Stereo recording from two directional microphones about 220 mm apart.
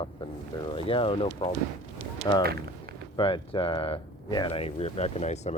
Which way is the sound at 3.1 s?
25° left (ahead or behind).